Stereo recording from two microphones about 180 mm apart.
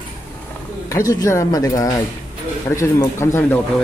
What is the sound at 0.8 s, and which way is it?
Speech, 15° left (ahead or behind).